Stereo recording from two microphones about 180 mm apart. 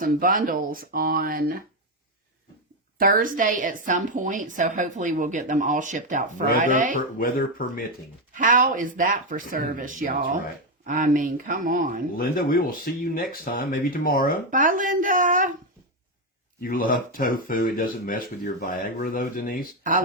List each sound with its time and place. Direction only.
0.0 s a woman's voice: 50° right (ahead or behind)
3.0 s a woman's voice: 50° right (ahead or behind)
6.9 s speech: 55° left (ahead or behind)
8.4 s a woman's voice: 50° right (ahead or behind)
12.1 s speech: 55° left (ahead or behind)
14.5 s a woman's voice: 50° right (ahead or behind)
16.6 s speech: 50° left (ahead or behind)